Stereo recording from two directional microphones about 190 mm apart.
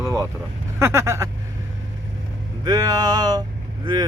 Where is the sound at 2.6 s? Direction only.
20° right (ahead or behind).